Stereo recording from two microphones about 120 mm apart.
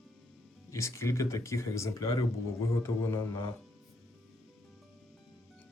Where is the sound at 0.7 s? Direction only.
25° left (ahead or behind).